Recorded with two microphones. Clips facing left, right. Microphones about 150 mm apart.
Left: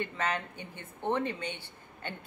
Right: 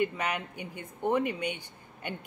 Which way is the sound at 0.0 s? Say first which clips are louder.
Right 3 dB; 15° right (ahead or behind).